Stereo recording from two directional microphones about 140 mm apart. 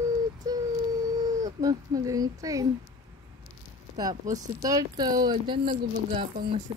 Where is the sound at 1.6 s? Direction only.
25° right (ahead or behind).